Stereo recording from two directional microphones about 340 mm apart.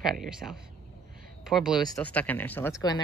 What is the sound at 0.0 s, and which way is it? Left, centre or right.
Speech, centre.